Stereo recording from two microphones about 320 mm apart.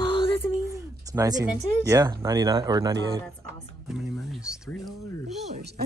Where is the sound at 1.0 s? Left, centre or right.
Centre.